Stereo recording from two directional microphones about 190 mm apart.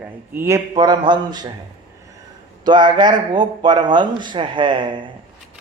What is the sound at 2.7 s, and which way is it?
A man's voice, 25° right (ahead or behind).